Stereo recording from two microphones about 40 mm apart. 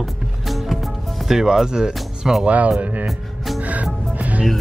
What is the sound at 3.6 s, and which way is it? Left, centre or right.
Music, right.